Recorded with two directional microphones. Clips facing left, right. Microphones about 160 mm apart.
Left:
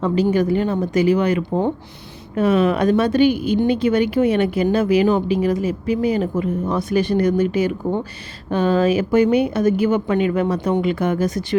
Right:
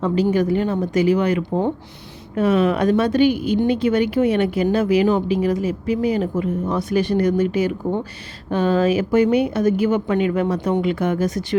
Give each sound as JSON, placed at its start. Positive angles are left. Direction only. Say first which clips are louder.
{"t": 0.0, "sound": "speech", "louder": "left 1 dB", "side_deg": 30}